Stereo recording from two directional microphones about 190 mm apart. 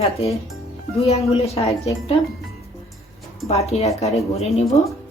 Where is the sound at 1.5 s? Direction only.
30° left (ahead or behind).